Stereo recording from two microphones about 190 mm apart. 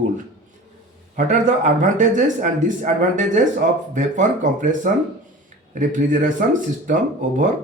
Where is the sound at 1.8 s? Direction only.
40° right (ahead or behind).